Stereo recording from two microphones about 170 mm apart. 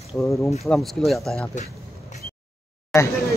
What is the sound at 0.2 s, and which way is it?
Speech, centre (ahead or behind).